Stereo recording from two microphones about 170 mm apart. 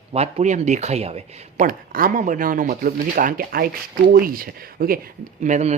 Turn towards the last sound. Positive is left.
turn(degrees=-45)  # may be behind; listen again after turning